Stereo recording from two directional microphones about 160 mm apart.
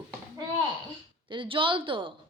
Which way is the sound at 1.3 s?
30° right (ahead or behind).